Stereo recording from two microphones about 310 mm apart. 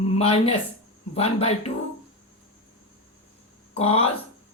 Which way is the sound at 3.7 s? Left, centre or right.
Centre.